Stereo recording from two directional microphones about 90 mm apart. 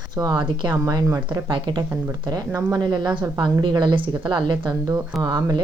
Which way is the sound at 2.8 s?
55° right (ahead or behind).